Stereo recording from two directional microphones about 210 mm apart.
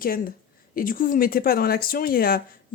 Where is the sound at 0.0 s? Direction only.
45° left (ahead or behind).